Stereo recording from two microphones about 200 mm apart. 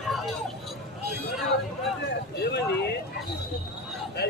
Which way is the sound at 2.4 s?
55° left (ahead or behind).